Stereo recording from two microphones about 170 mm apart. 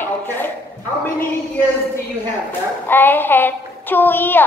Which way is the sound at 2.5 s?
10° left (ahead or behind).